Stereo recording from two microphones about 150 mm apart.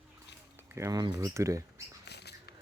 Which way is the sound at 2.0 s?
90° left.